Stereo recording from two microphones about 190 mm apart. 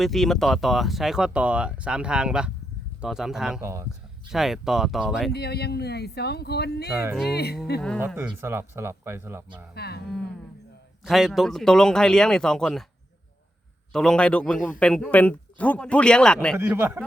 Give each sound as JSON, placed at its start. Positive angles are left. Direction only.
{"t": 0.0, "sound": "a man's voice", "side_deg": 0}
{"t": 3.6, "sound": "speech", "side_deg": -15}
{"t": 4.3, "sound": "a man's voice", "side_deg": 0}
{"t": 5.3, "sound": "speech", "side_deg": 60}
{"t": 7.9, "sound": "speech", "side_deg": -10}
{"t": 9.7, "sound": "speech", "side_deg": 60}
{"t": 11.0, "sound": "a man's voice", "side_deg": 0}
{"t": 13.9, "sound": "a man's voice", "side_deg": 5}
{"t": 16.6, "sound": "speech", "side_deg": -10}